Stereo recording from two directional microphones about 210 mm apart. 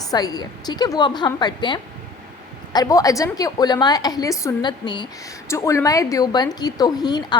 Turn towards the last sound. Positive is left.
turn(degrees=20)  # may be behind; listen again after turning